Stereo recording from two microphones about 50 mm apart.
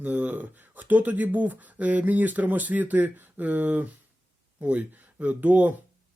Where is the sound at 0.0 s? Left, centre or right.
Right.